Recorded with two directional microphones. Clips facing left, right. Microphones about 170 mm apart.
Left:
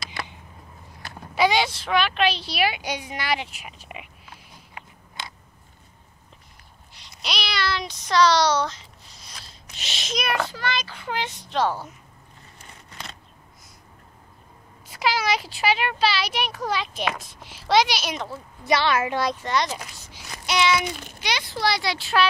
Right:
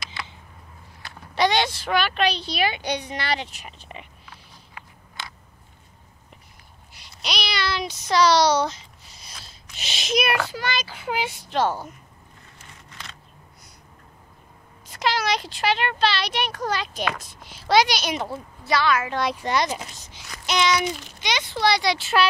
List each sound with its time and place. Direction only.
1.3 s a child's voice: 5° left (ahead or behind)
4.7 s biting: 15° left (ahead or behind)
6.9 s speech: centre (ahead or behind)
9.8 s a child's voice: centre (ahead or behind)
14.9 s a child's voice: 5° left (ahead or behind)
18.6 s a woman's voice: 25° left (ahead or behind)
19.3 s speech: 10° right (ahead or behind)
20.4 s a sound: 5° left (ahead or behind)
21.2 s a child's voice: centre (ahead or behind)